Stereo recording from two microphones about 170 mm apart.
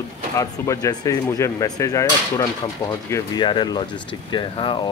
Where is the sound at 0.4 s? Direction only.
20° left (ahead or behind).